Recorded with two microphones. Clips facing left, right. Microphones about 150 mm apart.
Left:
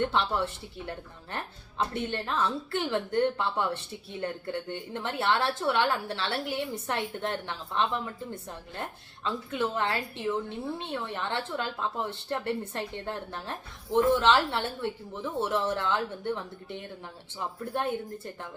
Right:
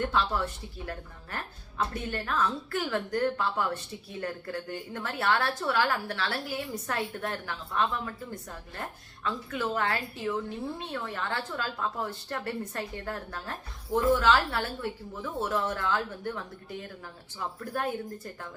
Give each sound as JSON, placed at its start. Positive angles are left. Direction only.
{"t": 0.0, "sound": "a woman's voice", "side_deg": 25}
{"t": 9.2, "sound": "a woman's voice", "side_deg": 25}